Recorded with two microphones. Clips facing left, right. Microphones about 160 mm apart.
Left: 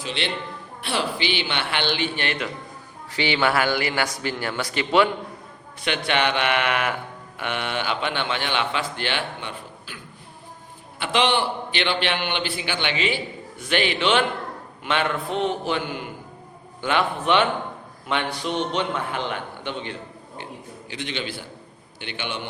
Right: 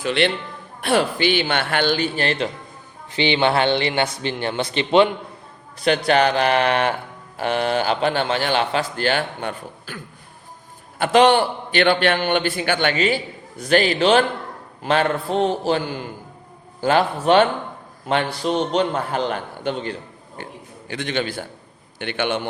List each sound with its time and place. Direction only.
0.0 s a man's voice: 55° right (ahead or behind); by 2.5 s 35° right (ahead or behind)
3.1 s speech: 20° right (ahead or behind)
5.8 s a man's voice: 40° right (ahead or behind)
20.4 s a man's voice: 50° right (ahead or behind)